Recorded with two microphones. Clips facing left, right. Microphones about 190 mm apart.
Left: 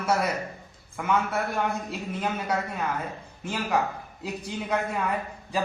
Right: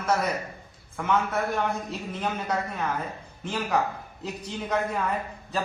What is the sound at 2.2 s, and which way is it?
Speech, 5° left (ahead or behind).